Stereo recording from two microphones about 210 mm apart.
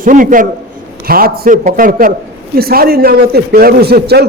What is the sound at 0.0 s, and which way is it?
A man's voice, 40° right (ahead or behind).